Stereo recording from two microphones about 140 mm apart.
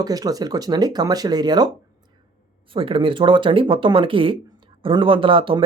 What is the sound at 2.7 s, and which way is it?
Speech, 40° right (ahead or behind).